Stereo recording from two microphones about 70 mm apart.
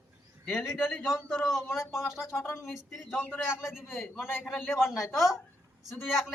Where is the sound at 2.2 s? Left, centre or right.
Left.